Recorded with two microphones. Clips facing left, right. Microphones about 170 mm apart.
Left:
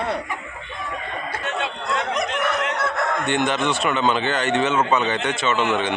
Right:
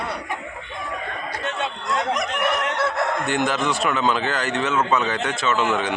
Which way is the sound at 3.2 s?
5° right (ahead or behind).